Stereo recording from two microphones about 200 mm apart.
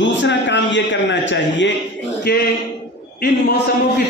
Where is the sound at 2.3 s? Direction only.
50° left (ahead or behind).